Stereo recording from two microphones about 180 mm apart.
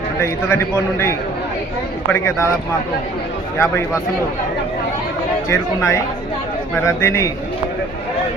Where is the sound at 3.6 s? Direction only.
15° left (ahead or behind).